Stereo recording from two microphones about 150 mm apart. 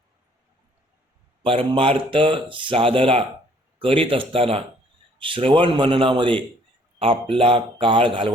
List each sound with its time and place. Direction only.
1.4 s speech: 35° right (ahead or behind)